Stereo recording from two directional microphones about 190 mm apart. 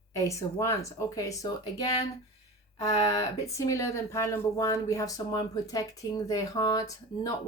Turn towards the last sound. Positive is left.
turn(degrees=20)  # may be behind; listen again after turning